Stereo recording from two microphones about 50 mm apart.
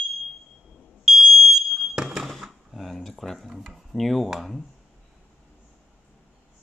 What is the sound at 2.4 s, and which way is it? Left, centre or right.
Speech, centre.